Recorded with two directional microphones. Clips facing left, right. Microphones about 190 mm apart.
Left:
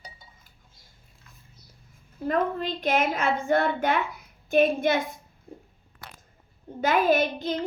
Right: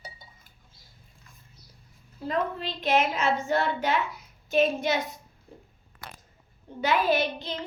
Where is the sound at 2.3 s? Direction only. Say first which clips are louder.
Left 4 dB; 50° left (ahead or behind).